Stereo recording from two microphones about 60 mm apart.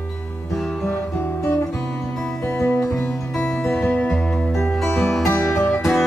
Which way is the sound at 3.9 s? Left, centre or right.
Left.